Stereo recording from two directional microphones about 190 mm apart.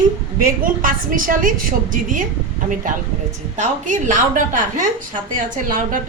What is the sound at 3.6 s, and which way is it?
A woman's voice, 40° right (ahead or behind).